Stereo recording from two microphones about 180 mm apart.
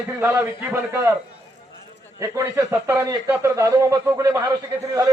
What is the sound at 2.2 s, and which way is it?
Speech, 15° right (ahead or behind).